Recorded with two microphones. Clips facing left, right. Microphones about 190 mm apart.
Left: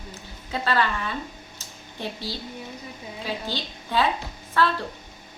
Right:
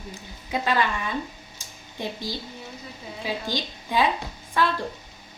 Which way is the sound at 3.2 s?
15° right (ahead or behind).